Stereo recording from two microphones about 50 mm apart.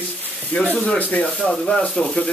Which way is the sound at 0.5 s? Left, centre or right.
Left.